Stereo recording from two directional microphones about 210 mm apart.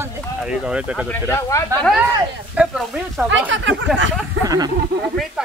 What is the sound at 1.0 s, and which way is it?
Speech, 10° left (ahead or behind).